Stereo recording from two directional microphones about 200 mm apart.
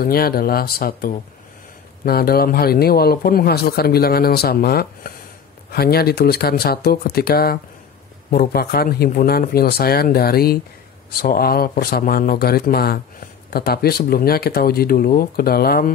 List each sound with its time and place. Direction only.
0.0 s speech: 50° left (ahead or behind)